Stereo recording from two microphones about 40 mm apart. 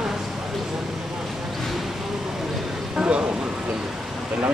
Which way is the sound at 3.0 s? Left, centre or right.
Right.